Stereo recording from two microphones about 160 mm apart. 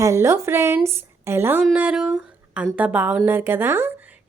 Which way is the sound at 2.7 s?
10° right (ahead or behind).